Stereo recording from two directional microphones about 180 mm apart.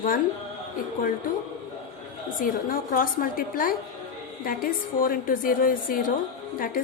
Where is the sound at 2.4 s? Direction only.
50° left (ahead or behind).